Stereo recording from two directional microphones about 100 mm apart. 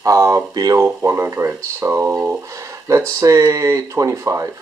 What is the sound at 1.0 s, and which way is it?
Speech, 30° right (ahead or behind).